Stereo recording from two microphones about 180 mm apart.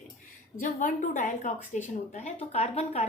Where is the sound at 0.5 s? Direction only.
45° left (ahead or behind).